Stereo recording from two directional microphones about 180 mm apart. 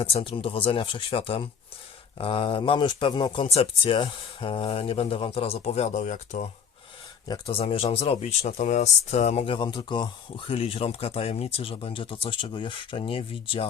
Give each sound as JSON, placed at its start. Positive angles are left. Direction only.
{"t": 0.0, "sound": "speech", "side_deg": 30}